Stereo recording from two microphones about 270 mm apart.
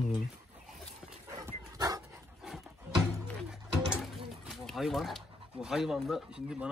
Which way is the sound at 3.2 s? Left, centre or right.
Centre.